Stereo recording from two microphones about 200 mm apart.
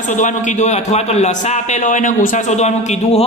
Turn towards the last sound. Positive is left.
turn(degrees=35)  # may be behind; listen again after turning